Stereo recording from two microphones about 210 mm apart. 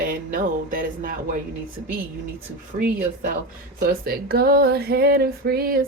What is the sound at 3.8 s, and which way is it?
Speech, 45° right (ahead or behind).